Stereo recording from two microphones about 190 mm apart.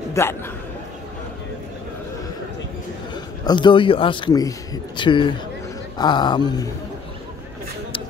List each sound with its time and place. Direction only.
0.1 s a man's voice: 15° left (ahead or behind)
3.4 s speech: 25° left (ahead or behind)